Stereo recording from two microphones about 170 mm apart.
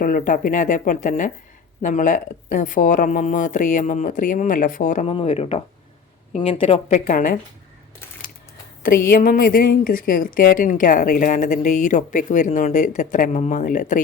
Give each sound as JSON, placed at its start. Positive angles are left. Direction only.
{"t": 0.0, "sound": "a woman's voice", "side_deg": 55}
{"t": 5.0, "sound": "a woman's voice", "side_deg": 35}
{"t": 8.8, "sound": "a woman's voice", "side_deg": 60}